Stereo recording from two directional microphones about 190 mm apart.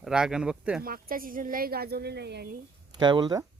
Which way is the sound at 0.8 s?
50° right (ahead or behind).